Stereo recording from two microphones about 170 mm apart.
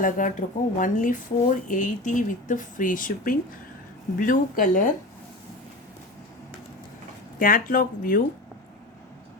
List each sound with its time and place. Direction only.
0.0 s speech: 50° left (ahead or behind)
7.3 s speech: 55° left (ahead or behind)